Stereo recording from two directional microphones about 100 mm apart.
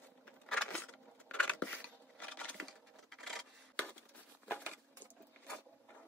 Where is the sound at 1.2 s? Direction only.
15° left (ahead or behind).